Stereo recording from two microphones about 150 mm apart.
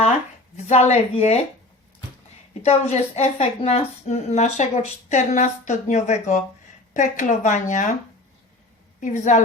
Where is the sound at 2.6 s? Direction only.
45° left (ahead or behind).